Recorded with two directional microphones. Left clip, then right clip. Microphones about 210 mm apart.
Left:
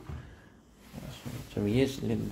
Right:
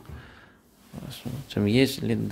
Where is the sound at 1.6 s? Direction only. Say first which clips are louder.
Right 6 dB; 40° right (ahead or behind).